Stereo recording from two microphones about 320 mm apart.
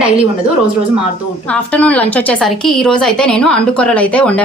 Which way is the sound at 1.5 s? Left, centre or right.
Centre.